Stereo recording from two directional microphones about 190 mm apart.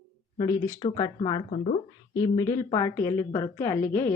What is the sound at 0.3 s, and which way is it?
A woman's voice, 20° left (ahead or behind).